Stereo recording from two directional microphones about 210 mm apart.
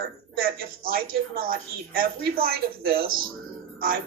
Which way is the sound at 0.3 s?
45° right (ahead or behind).